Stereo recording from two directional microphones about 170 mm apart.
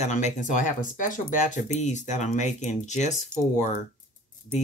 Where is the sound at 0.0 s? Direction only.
45° left (ahead or behind).